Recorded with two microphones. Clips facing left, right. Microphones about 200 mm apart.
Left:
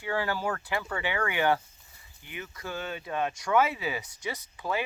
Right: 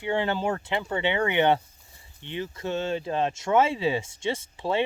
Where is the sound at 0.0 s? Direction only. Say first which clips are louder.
Right 4 dB; 25° right (ahead or behind).